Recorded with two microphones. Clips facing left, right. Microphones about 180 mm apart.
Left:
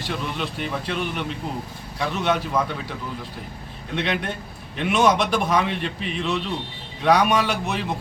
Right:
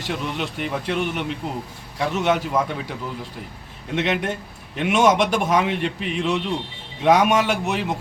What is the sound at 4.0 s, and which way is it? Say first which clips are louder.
A man's voice: right 3 dB; 20° right (ahead or behind).